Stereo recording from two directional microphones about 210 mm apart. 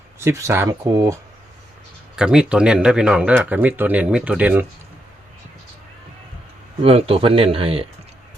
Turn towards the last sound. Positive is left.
turn(degrees=-25)  # may be behind; listen again after turning